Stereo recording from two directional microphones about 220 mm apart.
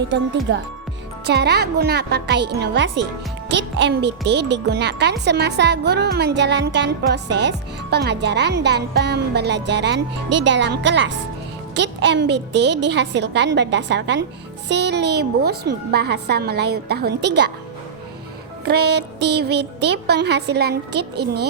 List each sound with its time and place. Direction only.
0.1 s a child's voice: 55° right (ahead or behind)
18.6 s a child's voice: 50° right (ahead or behind)